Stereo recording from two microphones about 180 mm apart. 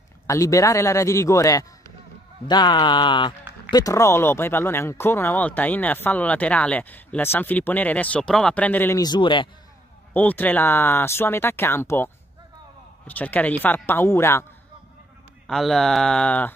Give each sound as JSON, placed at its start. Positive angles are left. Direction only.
{"t": 0.3, "sound": "speech", "side_deg": 20}
{"t": 10.1, "sound": "speech", "side_deg": 10}
{"t": 15.4, "sound": "speech", "side_deg": 0}